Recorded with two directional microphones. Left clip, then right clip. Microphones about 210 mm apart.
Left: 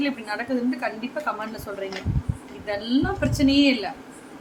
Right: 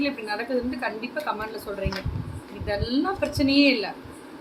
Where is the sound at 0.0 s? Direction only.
15° left (ahead or behind).